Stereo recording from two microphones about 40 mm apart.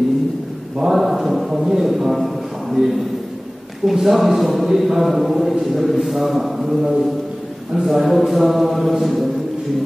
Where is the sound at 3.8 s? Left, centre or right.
Centre.